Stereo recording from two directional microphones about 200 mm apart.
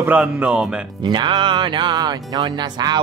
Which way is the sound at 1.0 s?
25° right (ahead or behind).